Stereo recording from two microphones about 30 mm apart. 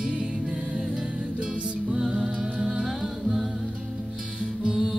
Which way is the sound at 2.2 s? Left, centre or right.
Right.